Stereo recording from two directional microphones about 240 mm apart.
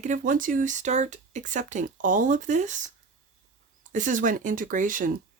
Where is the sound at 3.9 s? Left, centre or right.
Right.